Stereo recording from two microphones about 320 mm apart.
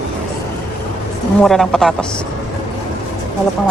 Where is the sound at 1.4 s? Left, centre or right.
Centre.